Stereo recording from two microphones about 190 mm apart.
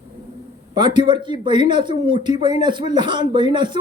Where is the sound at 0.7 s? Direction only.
25° right (ahead or behind).